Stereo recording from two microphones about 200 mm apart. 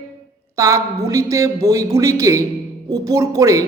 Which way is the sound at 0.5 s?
15° right (ahead or behind).